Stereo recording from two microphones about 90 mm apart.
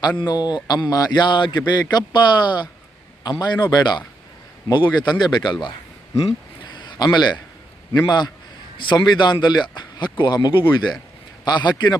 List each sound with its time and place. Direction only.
0.2 s speech: 50° left (ahead or behind)
1.2 s speech: 60° left (ahead or behind)
6.7 s a sound: 55° left (ahead or behind)
7.9 s speech: 50° left (ahead or behind)